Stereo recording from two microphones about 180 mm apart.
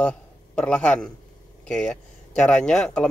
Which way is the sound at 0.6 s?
5° left (ahead or behind).